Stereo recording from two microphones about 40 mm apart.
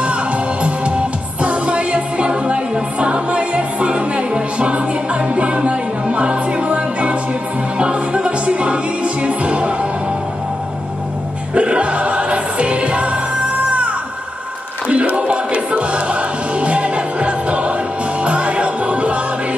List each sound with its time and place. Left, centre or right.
0.0 s music: right
11.5 s music: right
14.9 s music: right